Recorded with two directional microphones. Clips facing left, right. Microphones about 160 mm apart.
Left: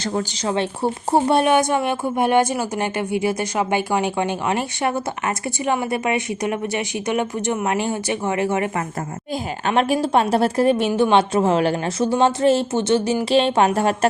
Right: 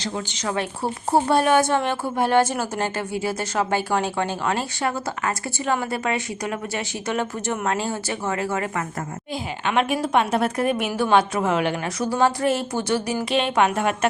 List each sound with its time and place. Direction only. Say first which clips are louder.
0.0 s speech: left 5 dB; 40° left (ahead or behind)
0.4 s a woman's voice: left 3 dB; 25° left (ahead or behind)
9.6 s a woman's voice: left 3 dB; 35° left (ahead or behind)